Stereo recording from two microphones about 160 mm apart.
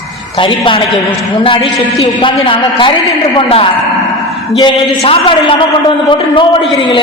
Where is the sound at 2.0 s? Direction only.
35° left (ahead or behind).